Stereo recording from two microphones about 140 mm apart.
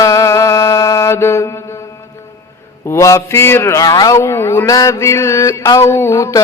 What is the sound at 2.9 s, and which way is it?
Mantra, 20° left (ahead or behind).